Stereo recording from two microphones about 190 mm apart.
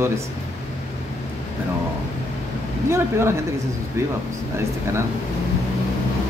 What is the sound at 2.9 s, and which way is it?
Speech, 15° right (ahead or behind).